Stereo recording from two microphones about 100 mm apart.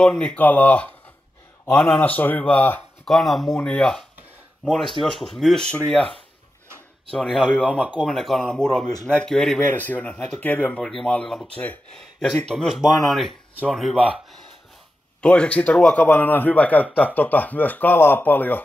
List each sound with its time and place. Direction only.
0.0 s a man's voice: 10° left (ahead or behind)
2.0 s a man's voice: 15° left (ahead or behind)
3.1 s a man's voice: centre (ahead or behind)
15.2 s a man's voice: 10° left (ahead or behind)